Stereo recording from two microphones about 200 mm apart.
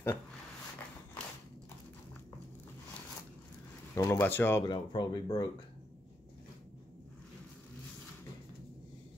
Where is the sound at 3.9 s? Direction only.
15° left (ahead or behind).